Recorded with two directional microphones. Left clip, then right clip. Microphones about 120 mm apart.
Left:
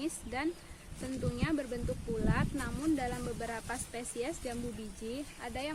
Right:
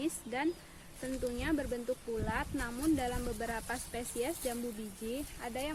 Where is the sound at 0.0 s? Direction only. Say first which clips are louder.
Right 1 dB; centre (ahead or behind).